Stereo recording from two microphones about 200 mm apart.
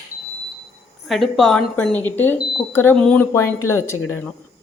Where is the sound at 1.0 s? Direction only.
Centre (ahead or behind).